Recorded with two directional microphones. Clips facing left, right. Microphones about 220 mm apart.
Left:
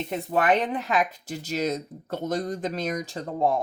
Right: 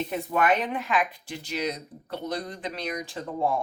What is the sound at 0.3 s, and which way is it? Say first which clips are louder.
Speech: left 2 dB; 40° left (ahead or behind).